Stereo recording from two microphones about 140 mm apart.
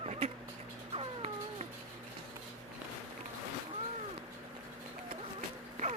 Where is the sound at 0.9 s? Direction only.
45° right (ahead or behind).